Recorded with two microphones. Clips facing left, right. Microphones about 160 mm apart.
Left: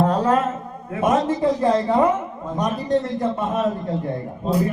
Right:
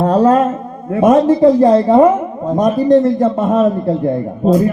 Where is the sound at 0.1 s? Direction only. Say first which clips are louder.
Right 8 dB; 35° right (ahead or behind).